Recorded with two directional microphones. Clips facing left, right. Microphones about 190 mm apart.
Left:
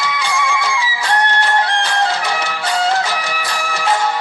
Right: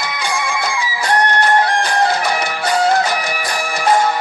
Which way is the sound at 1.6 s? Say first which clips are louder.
Right 2 dB; 50° right (ahead or behind).